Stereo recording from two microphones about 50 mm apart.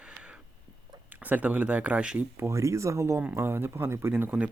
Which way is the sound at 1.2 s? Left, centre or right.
Right.